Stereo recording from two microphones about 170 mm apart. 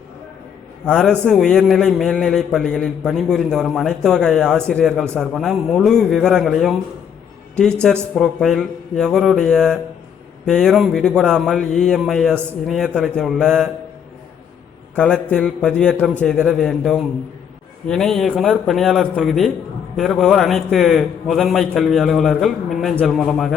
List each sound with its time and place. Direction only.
0.9 s a man's voice: 5° left (ahead or behind)
14.9 s a man's voice: 5° left (ahead or behind)